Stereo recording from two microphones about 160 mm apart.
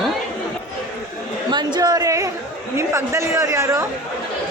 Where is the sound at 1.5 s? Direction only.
25° right (ahead or behind).